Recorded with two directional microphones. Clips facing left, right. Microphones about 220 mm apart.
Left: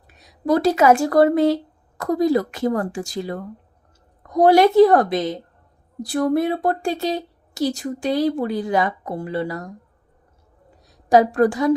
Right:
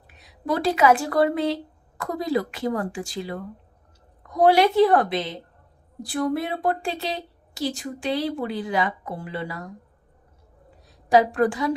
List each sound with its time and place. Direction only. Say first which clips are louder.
0.4 s a woman's voice: left 4 dB; 40° left (ahead or behind)
11.1 s a woman's voice: left 4 dB; 40° left (ahead or behind)